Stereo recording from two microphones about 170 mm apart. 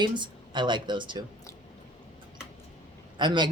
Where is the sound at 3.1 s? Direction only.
25° right (ahead or behind).